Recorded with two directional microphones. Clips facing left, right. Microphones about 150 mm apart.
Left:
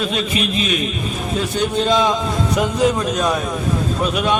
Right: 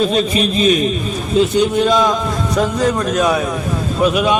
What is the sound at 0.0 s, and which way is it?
Mantra, 35° right (ahead or behind).